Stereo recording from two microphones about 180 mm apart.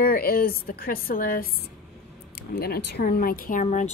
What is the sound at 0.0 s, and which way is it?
A woman's voice, 55° left (ahead or behind).